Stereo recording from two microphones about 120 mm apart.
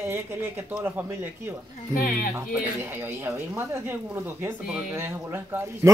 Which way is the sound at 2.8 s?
15° right (ahead or behind).